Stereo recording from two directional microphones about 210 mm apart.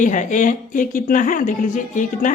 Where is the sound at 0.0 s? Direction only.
35° left (ahead or behind).